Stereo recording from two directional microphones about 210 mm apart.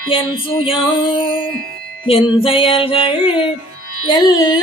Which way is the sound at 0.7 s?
25° left (ahead or behind).